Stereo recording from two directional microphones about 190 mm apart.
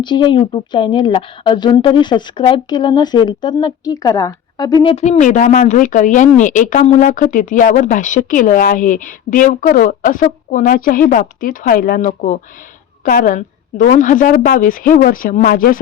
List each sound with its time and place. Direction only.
0.0 s speech: 25° left (ahead or behind)
5.0 s speech: 40° left (ahead or behind)